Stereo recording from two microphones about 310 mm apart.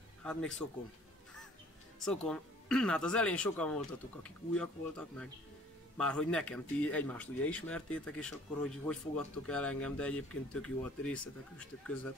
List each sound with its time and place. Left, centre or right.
0.2 s speech: centre
2.0 s speech: centre